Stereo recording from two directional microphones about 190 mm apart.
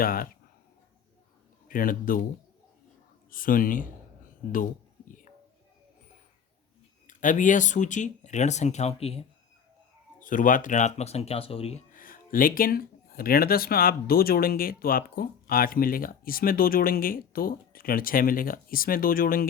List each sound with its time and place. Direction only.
0.0 s speech: 50° left (ahead or behind)
1.6 s speech: 45° left (ahead or behind)
3.2 s speech: 45° left (ahead or behind)
7.1 s speech: 40° left (ahead or behind)
10.2 s speech: 45° left (ahead or behind)
11.9 s speech: 45° left (ahead or behind)